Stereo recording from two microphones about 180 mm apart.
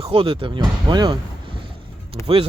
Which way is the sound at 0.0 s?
30° right (ahead or behind).